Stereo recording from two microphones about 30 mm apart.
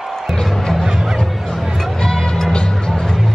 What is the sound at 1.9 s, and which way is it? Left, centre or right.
Music, left.